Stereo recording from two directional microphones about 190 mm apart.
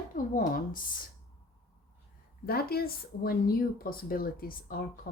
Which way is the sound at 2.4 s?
55° left (ahead or behind).